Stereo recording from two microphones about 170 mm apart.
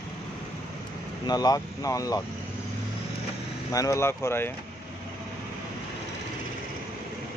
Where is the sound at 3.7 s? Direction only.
20° left (ahead or behind).